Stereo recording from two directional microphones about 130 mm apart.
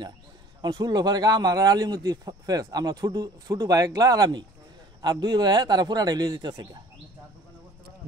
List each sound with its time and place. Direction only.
0.6 s a man's voice: 30° right (ahead or behind)